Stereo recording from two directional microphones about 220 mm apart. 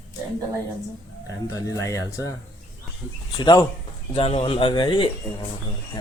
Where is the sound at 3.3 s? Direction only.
20° left (ahead or behind).